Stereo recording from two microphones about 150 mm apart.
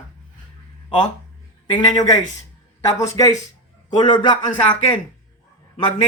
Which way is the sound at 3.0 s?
20° left (ahead or behind).